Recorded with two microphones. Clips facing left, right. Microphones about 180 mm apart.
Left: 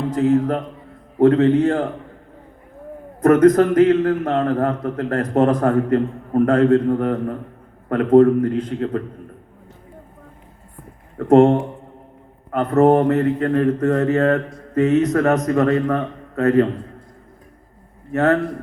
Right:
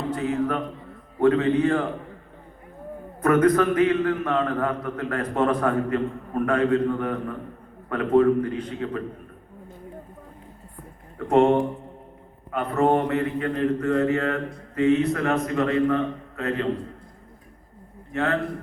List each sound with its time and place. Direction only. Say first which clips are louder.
0.2 s a man's voice: left 10 dB; 45° left (ahead or behind)
3.2 s a man's voice: left 6 dB; 45° left (ahead or behind)
11.2 s a man's voice: left 6 dB; 50° left (ahead or behind)
13.7 s mantra: left 5 dB; 40° left (ahead or behind)
14.8 s a man's voice: left 4 dB; 40° left (ahead or behind)
18.1 s mantra: left 8 dB; 40° left (ahead or behind)